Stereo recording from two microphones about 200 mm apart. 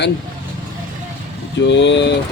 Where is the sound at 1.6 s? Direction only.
65° left (ahead or behind).